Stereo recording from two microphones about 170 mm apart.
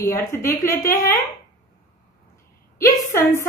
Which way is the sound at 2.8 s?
15° left (ahead or behind).